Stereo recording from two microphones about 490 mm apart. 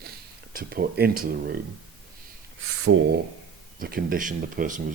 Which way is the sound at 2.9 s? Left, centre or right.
Right.